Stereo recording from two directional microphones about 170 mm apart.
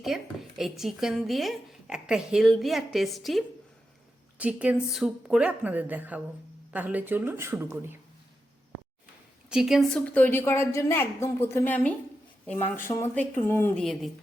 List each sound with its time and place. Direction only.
0.0 s a woman's voice: centre (ahead or behind)
9.5 s speech: centre (ahead or behind)
10.2 s a woman's voice: 10° left (ahead or behind)